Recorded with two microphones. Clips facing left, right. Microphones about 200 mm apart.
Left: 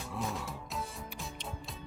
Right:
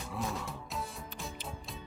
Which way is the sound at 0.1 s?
Centre (ahead or behind).